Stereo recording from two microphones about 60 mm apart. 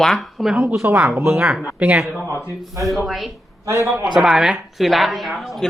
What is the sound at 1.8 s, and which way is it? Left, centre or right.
Speech, right.